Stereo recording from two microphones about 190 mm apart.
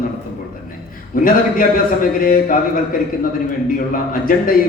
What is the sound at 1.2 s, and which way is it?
A man's voice, 45° left (ahead or behind).